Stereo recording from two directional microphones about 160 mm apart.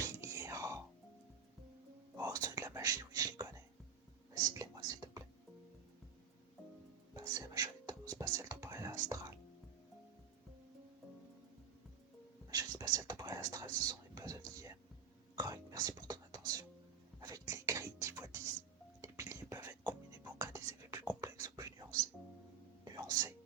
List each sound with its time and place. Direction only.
0.0 s whispering: 20° right (ahead or behind)
2.1 s whispering: 20° right (ahead or behind)
7.1 s whispering: 20° right (ahead or behind)
12.5 s whispering: 25° right (ahead or behind)
17.2 s a sound: 25° right (ahead or behind)
19.0 s whispering: 20° right (ahead or behind)
22.8 s music: 25° right (ahead or behind)